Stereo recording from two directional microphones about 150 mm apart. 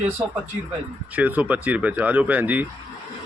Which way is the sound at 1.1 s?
10° right (ahead or behind).